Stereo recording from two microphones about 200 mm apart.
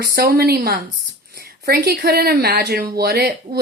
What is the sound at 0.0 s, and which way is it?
Speech, 50° right (ahead or behind).